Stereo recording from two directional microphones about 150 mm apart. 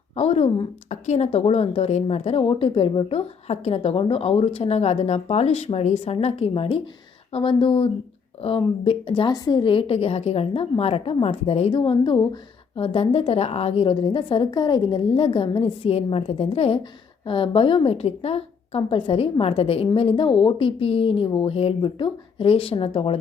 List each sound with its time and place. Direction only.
0.2 s a woman's voice: 45° left (ahead or behind)